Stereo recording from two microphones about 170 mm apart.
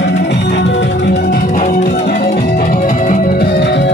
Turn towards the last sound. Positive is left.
turn(degrees=90)